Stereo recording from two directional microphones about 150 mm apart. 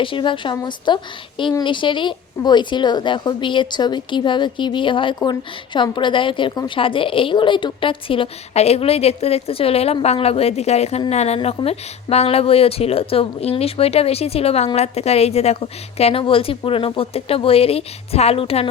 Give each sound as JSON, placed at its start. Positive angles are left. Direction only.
{"t": 0.0, "sound": "a woman's voice", "side_deg": 35}